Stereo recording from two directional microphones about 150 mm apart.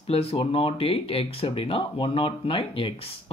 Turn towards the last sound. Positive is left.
turn(degrees=40)  # may be behind; listen again after turning